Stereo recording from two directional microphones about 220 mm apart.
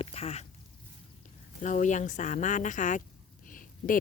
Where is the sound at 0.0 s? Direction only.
25° left (ahead or behind).